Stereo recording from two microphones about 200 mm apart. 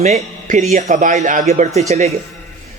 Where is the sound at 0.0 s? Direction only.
35° right (ahead or behind).